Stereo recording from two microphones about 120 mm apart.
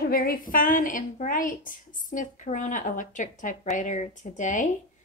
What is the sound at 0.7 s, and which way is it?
A woman's voice, 90° left.